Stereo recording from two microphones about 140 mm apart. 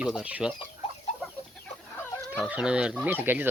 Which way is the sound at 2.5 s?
5° right (ahead or behind).